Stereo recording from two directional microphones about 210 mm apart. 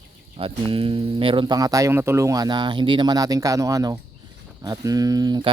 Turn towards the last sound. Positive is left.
turn(degrees=-20)  # may be behind; listen again after turning